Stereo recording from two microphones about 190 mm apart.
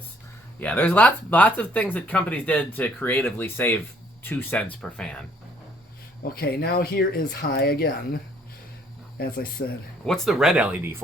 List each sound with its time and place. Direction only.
0.6 s speech: 10° left (ahead or behind)
6.2 s speech: 55° left (ahead or behind)
10.1 s speech: centre (ahead or behind)